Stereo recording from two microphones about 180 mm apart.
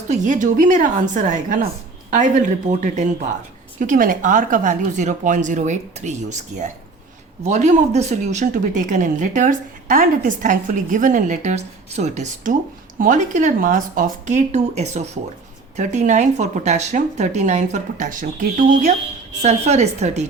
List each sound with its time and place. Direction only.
0.1 s speech: 45° right (ahead or behind)